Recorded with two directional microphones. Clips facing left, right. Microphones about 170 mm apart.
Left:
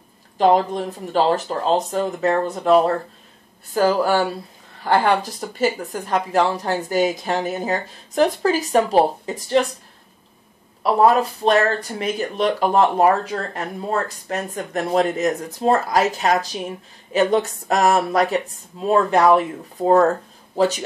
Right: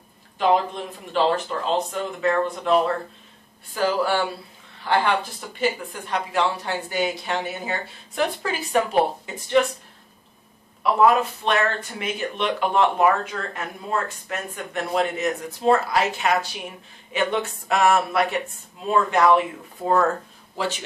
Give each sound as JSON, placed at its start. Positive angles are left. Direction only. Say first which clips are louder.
{"t": 0.4, "sound": "speech", "louder": "left 4 dB", "side_deg": 40}
{"t": 10.8, "sound": "speech", "louder": "left 2 dB", "side_deg": 35}